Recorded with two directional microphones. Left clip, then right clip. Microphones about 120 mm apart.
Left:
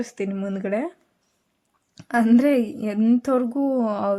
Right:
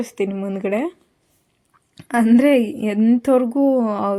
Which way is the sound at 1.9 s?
10° right (ahead or behind).